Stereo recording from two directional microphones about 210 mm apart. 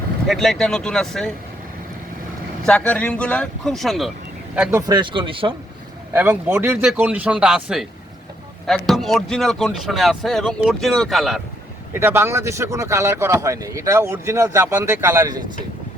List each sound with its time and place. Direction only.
0.3 s speech: centre (ahead or behind)
2.6 s speech: 5° left (ahead or behind)
4.9 s speech: 20° right (ahead or behind)
6.1 s speech: 10° right (ahead or behind)
11.9 s speech: 10° right (ahead or behind)